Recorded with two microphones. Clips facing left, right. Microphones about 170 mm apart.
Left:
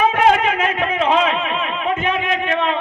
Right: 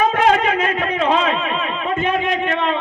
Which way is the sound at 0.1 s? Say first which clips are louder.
Even; 40° right (ahead or behind).